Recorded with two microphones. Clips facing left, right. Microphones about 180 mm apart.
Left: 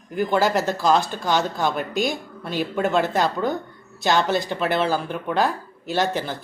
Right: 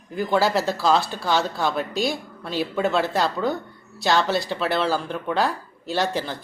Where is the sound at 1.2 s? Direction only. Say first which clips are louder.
Left 1 dB; 15° left (ahead or behind).